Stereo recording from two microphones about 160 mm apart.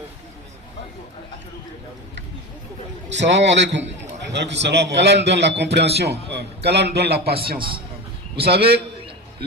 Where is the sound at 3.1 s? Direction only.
90° right.